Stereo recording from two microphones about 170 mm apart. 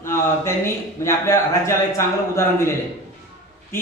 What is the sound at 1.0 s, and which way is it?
A man's voice, 15° left (ahead or behind).